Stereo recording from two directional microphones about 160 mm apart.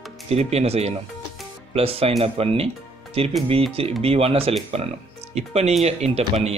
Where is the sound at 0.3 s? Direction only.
40° right (ahead or behind).